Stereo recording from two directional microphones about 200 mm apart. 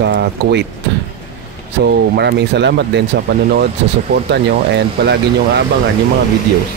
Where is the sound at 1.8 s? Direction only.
55° right (ahead or behind).